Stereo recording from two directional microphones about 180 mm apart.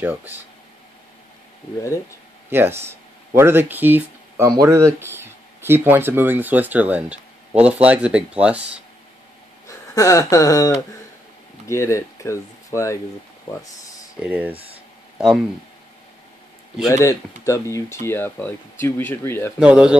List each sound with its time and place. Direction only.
0.0 s speech: 10° right (ahead or behind)
2.5 s speech: 15° right (ahead or behind)
9.7 s speech: 15° left (ahead or behind)
14.2 s speech: 10° right (ahead or behind)
16.8 s speech: 20° left (ahead or behind)
19.6 s speech: 5° right (ahead or behind)